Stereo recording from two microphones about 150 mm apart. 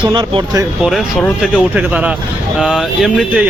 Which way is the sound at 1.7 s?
10° right (ahead or behind).